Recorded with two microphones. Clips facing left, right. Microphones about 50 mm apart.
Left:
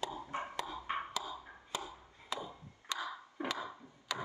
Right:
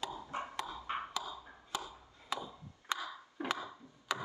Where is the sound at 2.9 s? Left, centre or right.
Left.